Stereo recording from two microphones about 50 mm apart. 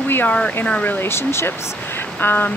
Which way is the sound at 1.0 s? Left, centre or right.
Left.